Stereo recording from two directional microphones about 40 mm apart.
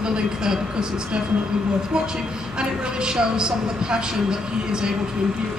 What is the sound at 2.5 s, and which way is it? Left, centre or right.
A woman's voice, centre.